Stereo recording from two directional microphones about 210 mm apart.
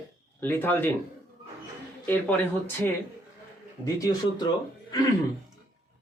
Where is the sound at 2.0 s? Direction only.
10° left (ahead or behind).